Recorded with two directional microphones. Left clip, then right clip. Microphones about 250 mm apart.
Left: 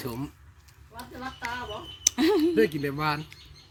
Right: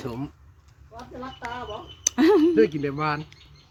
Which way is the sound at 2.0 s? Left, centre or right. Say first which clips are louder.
Right 5 dB; right.